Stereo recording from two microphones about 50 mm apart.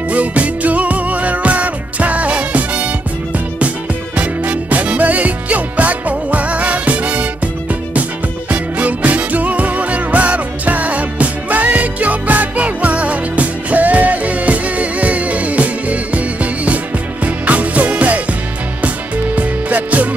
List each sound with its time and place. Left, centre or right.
0.1 s music: right
4.2 s music: right
8.5 s music: right
19.3 s music: right